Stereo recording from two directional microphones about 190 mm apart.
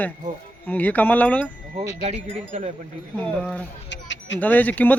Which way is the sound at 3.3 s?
5° left (ahead or behind).